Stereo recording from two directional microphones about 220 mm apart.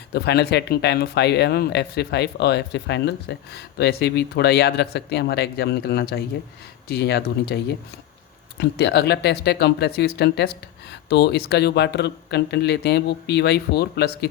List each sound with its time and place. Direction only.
0.1 s speech: 50° left (ahead or behind)